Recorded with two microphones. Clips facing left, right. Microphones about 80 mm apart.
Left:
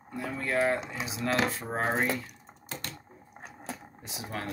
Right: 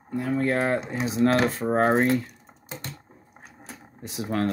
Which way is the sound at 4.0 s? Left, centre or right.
Right.